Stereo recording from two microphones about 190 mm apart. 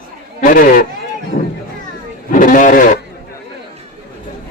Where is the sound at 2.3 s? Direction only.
45° left (ahead or behind).